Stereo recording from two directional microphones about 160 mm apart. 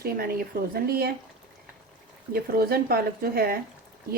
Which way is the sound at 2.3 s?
70° right (ahead or behind).